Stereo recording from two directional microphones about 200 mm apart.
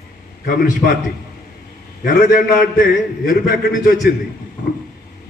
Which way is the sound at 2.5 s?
45° left (ahead or behind).